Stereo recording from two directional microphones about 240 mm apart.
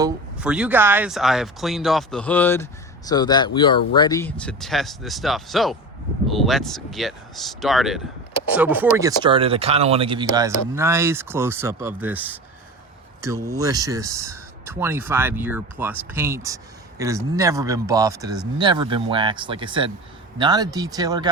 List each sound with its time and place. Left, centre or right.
0.3 s speech: centre